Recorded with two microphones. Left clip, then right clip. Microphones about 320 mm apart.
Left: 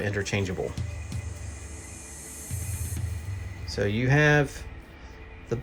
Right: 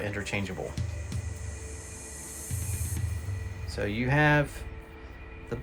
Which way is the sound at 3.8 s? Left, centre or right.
Left.